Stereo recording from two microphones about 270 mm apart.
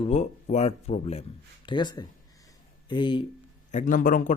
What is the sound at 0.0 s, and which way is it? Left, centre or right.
Speech, left.